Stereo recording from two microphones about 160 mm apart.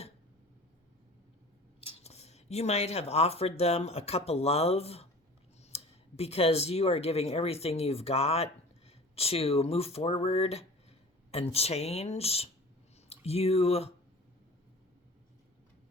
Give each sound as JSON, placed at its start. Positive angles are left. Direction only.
{"t": 1.8, "sound": "speech", "side_deg": 40}